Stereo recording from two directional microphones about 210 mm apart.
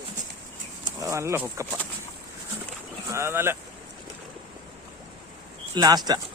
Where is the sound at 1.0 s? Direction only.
15° right (ahead or behind).